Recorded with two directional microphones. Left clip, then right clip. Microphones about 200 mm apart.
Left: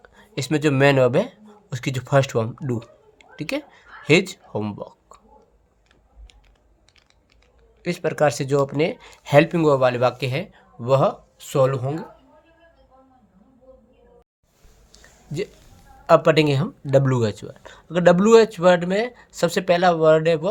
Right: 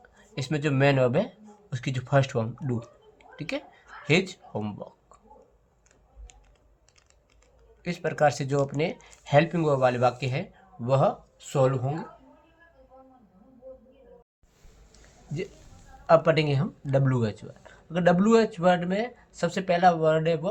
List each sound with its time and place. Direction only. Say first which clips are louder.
0.1 s speech: left 8 dB; 45° left (ahead or behind)
7.8 s speech: left 4 dB; 40° left (ahead or behind)
14.9 s a sound: left 7 dB; 50° left (ahead or behind)
16.0 s speech: left 5 dB; 50° left (ahead or behind)